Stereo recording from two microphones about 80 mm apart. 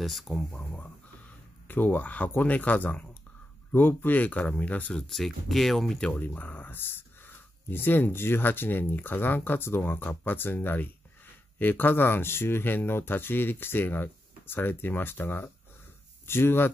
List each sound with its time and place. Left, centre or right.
0.0 s speech: centre
0.5 s speech: centre
1.7 s speech: left
4.9 s speech: centre
6.1 s speech: left